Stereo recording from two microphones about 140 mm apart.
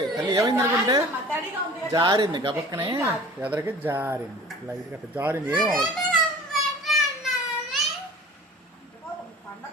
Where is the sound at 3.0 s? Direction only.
15° right (ahead or behind).